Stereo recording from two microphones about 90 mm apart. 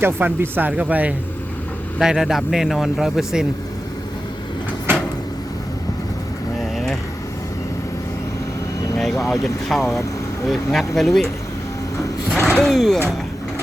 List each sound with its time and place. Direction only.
0.0 s speech: 20° right (ahead or behind)
2.0 s speech: 5° right (ahead or behind)
9.0 s speech: 5° left (ahead or behind)
12.4 s speech: 10° left (ahead or behind)